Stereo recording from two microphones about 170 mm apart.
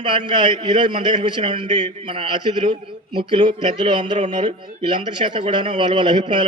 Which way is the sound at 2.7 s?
25° right (ahead or behind).